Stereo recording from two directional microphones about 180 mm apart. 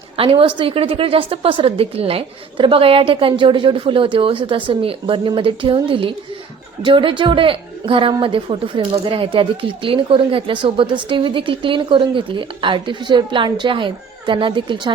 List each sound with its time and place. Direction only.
0.2 s a woman's voice: 30° right (ahead or behind)